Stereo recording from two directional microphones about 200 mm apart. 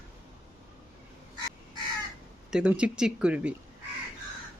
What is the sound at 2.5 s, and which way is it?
Speech, 5° right (ahead or behind).